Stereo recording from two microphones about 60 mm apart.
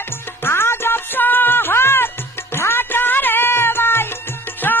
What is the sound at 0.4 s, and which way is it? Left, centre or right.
Music, left.